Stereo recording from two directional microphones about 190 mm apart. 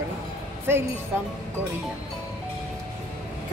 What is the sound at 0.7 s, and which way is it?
Speech, 10° right (ahead or behind).